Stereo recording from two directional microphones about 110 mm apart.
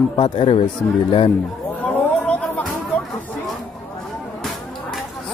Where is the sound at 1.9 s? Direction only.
15° left (ahead or behind).